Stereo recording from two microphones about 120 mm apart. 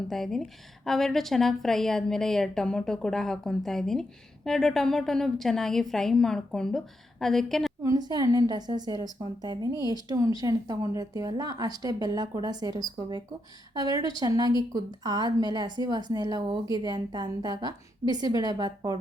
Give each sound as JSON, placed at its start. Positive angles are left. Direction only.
{"t": 0.1, "sound": "a woman's voice", "side_deg": 0}
{"t": 7.9, "sound": "a woman's voice", "side_deg": -35}